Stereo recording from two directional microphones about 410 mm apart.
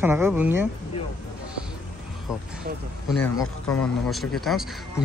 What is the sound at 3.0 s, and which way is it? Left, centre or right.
Speech, centre.